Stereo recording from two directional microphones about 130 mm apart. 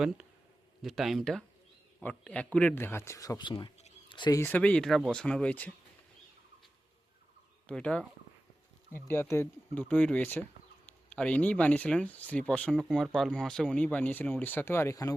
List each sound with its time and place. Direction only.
0.8 s speech: centre (ahead or behind); by 4.4 s 35° left (ahead or behind)
4.4 s speech: 15° left (ahead or behind)
7.7 s speech: 10° left (ahead or behind)
9.0 s speech: 20° left (ahead or behind)